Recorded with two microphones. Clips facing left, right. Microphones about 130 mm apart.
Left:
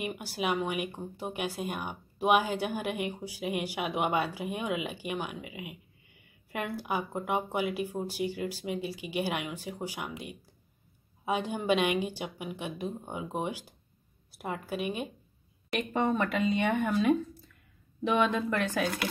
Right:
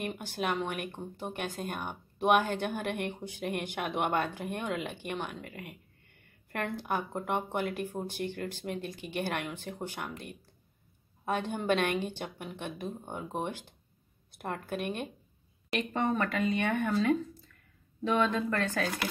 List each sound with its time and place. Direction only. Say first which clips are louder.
0.0 s a woman's voice: left 1 dB; 10° left (ahead or behind)